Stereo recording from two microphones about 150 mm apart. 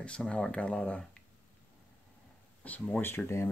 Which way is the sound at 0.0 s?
5° left (ahead or behind).